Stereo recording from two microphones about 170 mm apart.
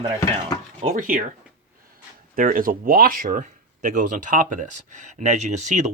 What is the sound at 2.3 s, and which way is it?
Speech, 55° right (ahead or behind).